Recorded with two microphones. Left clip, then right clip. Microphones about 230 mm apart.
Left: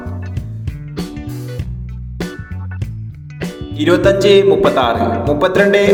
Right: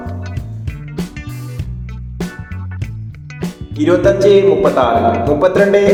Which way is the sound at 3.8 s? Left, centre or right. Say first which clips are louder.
Right 1 dB; left.